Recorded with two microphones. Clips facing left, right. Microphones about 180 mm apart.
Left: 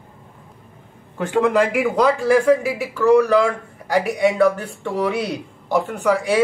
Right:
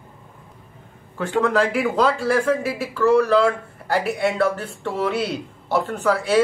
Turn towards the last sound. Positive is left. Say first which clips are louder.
# even
turn(degrees=15)  # may be behind; listen again after turning